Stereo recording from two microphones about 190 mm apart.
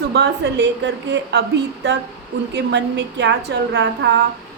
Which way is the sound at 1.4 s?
65° right (ahead or behind).